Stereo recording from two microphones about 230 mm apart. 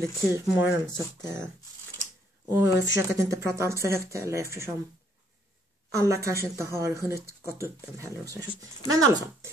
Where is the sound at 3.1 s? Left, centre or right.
Centre.